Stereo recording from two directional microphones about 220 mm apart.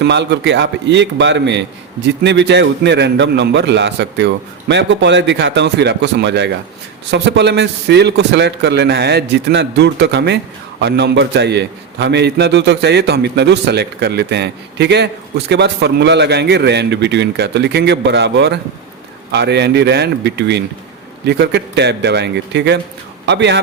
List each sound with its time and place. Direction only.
0.0 s a man's voice: 50° right (ahead or behind)